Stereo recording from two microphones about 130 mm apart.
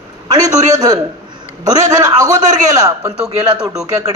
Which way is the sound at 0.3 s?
30° right (ahead or behind).